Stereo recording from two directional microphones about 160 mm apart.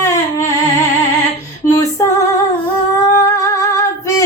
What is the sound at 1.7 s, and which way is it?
Female singing, 20° left (ahead or behind).